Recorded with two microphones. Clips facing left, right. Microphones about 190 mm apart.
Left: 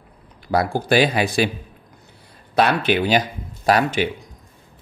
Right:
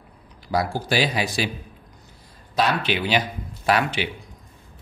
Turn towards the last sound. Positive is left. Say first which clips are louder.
# left 4 dB
turn(degrees=40)  # may be behind; listen again after turning